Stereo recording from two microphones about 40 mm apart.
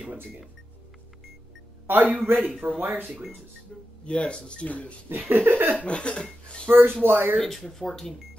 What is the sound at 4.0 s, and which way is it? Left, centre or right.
Speech, left.